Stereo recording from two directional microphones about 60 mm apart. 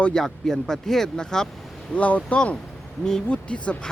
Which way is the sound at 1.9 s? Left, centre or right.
Left.